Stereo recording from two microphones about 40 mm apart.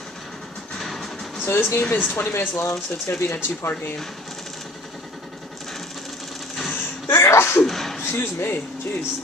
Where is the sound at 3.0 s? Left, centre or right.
Left.